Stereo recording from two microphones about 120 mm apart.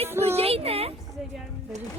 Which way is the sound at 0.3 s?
55° right (ahead or behind).